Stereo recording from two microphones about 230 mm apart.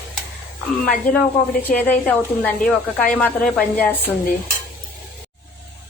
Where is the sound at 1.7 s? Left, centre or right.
Centre.